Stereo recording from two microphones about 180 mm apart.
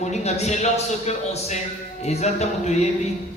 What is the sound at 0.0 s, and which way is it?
A man's voice, 40° left (ahead or behind).